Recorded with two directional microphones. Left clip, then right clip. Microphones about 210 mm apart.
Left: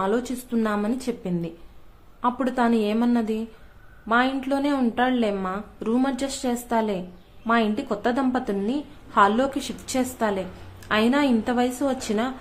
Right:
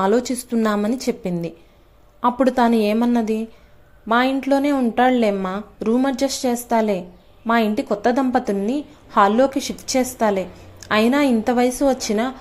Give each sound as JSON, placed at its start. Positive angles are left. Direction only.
{"t": 0.0, "sound": "a woman's voice", "side_deg": -15}